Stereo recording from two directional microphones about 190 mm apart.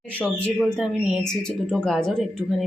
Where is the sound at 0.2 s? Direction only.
5° left (ahead or behind).